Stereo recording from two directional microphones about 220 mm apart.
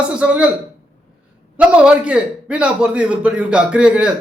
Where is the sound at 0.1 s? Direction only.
5° right (ahead or behind).